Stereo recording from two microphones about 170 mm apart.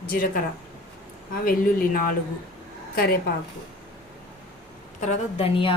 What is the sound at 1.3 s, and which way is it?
Speech, 55° left (ahead or behind).